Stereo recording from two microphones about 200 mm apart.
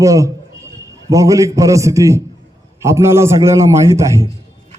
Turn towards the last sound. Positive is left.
turn(degrees=-15)  # may be behind; listen again after turning